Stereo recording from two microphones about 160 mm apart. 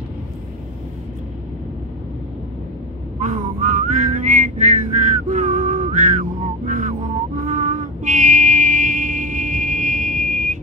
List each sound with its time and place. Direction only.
3.2 s whistling: 50° right (ahead or behind)
7.4 s music: 50° right (ahead or behind)